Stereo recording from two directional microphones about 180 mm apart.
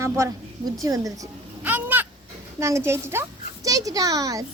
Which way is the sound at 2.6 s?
15° right (ahead or behind).